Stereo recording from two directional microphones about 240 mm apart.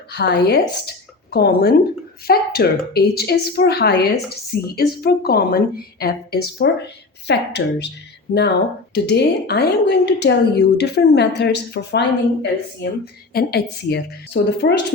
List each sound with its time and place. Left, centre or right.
0.1 s a woman's voice: left